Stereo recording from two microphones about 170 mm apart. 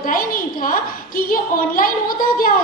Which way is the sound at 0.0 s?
55° left (ahead or behind).